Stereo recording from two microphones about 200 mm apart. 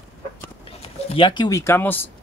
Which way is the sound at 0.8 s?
30° left (ahead or behind).